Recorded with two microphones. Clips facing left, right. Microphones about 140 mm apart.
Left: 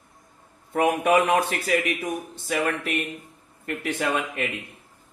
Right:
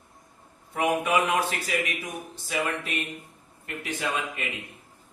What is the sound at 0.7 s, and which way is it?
A man's voice, 50° left (ahead or behind).